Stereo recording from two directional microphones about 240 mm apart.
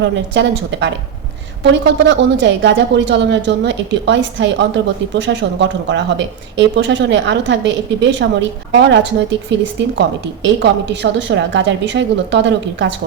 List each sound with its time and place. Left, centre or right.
0.0 s a woman's voice: right